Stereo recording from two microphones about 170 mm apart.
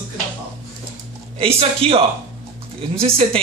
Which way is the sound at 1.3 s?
35° right (ahead or behind).